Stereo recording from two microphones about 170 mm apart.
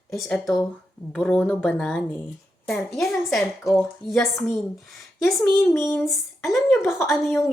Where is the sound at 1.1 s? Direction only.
5° left (ahead or behind).